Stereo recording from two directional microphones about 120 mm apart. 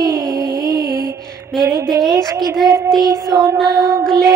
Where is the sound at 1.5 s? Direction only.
Centre (ahead or behind).